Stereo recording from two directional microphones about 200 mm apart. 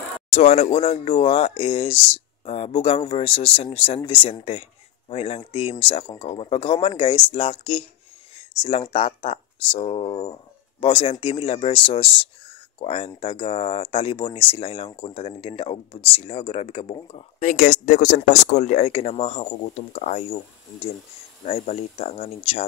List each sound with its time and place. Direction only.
0.3 s speech: 35° left (ahead or behind)
17.4 s speech: 40° left (ahead or behind)
21.5 s speech: 30° left (ahead or behind)